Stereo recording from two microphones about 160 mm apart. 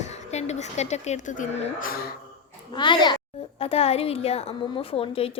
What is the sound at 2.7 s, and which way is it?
A child's voice, 30° left (ahead or behind).